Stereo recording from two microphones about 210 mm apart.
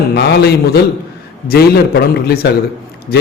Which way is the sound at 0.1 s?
50° left (ahead or behind).